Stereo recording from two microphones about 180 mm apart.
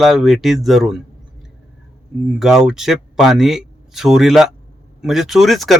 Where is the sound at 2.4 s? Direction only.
5° right (ahead or behind).